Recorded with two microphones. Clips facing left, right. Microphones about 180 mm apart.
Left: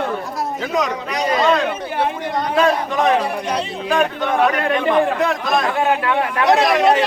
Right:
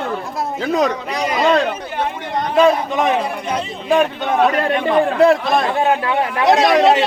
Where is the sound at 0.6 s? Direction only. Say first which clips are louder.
Right 5 dB; 30° right (ahead or behind).